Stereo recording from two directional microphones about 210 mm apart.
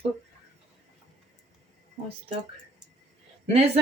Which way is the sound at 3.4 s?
30° right (ahead or behind).